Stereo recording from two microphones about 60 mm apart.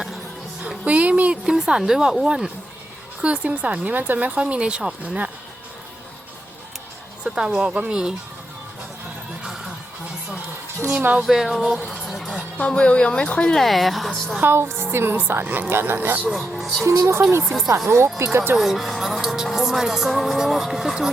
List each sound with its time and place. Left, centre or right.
0.9 s speech: right
1.5 s a woman's voice: centre
3.2 s speech: centre
7.3 s a woman's voice: centre
9.4 s music: centre
11.2 s a woman's voice: centre
12.4 s speech: left
13.6 s a woman's voice: centre
14.4 s a woman's voice: right
16.3 s a woman's voice: centre
16.8 s speech: right
17.4 s a woman's voice: centre
17.8 s a woman's voice: right
18.5 s speech: centre